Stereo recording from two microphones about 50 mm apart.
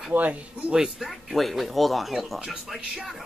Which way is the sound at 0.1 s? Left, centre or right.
Right.